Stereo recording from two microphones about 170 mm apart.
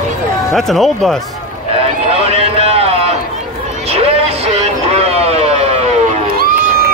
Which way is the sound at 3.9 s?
35° right (ahead or behind).